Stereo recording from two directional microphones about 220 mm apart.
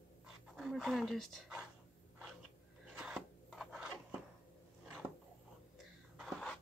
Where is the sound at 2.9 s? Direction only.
Centre (ahead or behind).